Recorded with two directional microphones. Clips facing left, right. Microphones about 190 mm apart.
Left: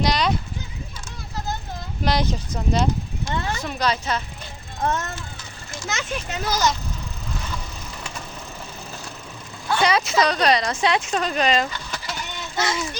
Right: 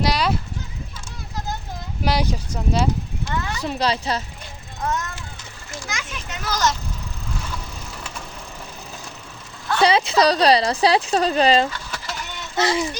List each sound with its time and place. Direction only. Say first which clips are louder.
0.0 s clip-clop: even; 5° right (ahead or behind)
2.0 s speech: even; 10° right (ahead or behind)
3.3 s speech: left 1 dB; 35° left (ahead or behind)
3.6 s speech: right 2 dB; 30° right (ahead or behind)
5.9 s a child's voice: left 7 dB; 25° left (ahead or behind)
6.5 s speech: even; centre (ahead or behind)
9.8 s speech: right 4 dB; 30° right (ahead or behind)
11.7 s vehicle: even; 5° right (ahead or behind)
12.5 s child singing: right 5 dB; 30° right (ahead or behind)